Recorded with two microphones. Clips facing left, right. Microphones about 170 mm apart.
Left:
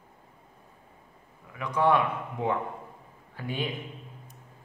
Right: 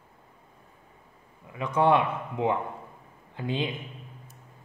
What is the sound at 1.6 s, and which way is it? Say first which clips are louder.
Speech: right 2 dB; 25° right (ahead or behind).